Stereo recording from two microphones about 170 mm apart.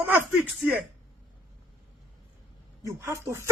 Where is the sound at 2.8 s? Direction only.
15° right (ahead or behind).